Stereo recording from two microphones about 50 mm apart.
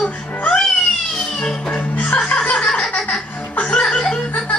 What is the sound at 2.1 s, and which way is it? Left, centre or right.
Music, left.